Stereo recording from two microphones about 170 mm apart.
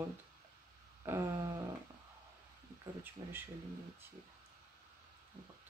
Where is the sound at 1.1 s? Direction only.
15° right (ahead or behind).